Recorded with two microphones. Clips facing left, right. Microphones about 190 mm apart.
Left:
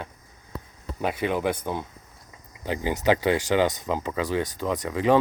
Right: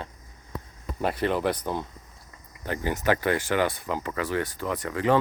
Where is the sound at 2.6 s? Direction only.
15° left (ahead or behind).